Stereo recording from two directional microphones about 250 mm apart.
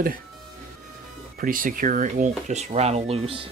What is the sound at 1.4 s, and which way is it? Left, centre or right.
Speech, right.